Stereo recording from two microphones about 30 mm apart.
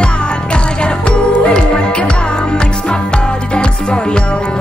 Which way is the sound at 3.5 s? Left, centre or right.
Left.